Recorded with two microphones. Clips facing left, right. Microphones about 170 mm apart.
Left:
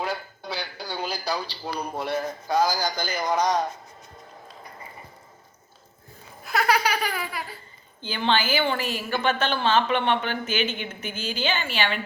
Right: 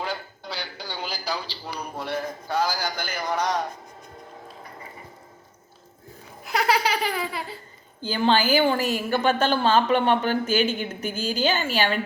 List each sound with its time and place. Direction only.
0.0 s a sound: 10° left (ahead or behind)
2.0 s a man's voice: 15° left (ahead or behind)
6.4 s baby laughter: 20° right (ahead or behind)
8.0 s a woman's voice: 40° right (ahead or behind)